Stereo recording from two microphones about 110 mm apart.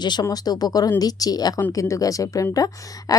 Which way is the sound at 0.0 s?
40° left (ahead or behind).